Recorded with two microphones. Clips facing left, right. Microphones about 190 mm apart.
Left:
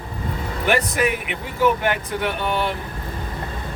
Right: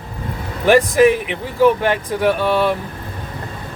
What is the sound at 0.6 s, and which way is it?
Speech, 30° right (ahead or behind).